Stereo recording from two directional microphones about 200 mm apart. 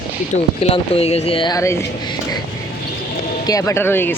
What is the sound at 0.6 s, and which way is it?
Speech, 30° left (ahead or behind).